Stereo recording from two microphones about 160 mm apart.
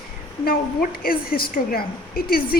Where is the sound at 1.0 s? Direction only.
65° left (ahead or behind).